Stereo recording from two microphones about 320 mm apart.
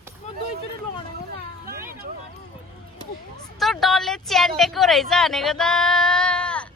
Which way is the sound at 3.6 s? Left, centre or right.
Centre.